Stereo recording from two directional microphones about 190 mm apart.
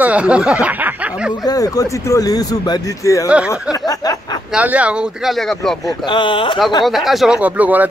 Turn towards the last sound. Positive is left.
turn(degrees=-10)  # may be behind; listen again after turning